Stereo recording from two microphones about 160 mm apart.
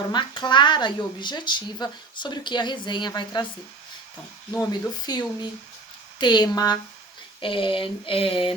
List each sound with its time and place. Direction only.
0.1 s speech: 30° left (ahead or behind)
4.7 s speech: 25° left (ahead or behind)
7.4 s a sound: 35° left (ahead or behind)